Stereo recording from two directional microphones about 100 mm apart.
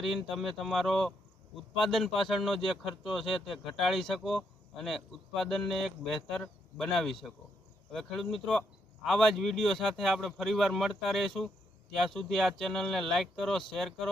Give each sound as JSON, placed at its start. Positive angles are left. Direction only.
{"t": 0.0, "sound": "speech", "side_deg": 0}